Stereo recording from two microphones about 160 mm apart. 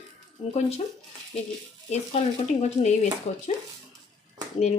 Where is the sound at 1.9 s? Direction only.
45° left (ahead or behind).